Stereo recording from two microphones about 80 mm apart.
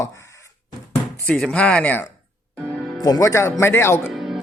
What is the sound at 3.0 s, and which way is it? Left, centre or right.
Speech, left.